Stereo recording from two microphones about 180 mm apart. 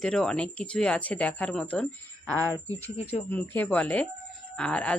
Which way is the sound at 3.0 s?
35° left (ahead or behind).